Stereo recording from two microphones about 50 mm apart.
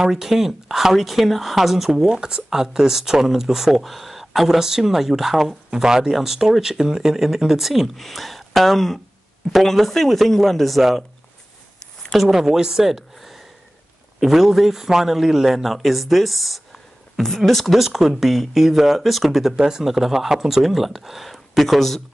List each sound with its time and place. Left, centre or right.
0.0 s speech: centre
11.8 s a sound: centre
12.2 s speech: centre